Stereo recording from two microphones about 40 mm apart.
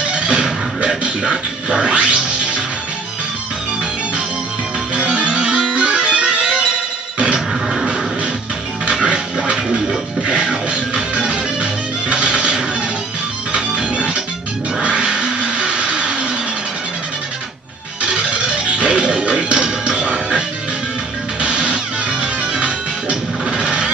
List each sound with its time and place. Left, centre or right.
0.1 s music: right
4.9 s music: right
9.4 s music: right
14.8 s a sound: right
18.0 s music: right